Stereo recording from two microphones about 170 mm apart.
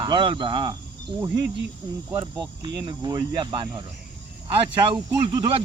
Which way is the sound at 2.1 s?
20° right (ahead or behind).